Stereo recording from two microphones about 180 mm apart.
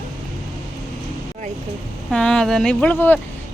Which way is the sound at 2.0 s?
5° left (ahead or behind).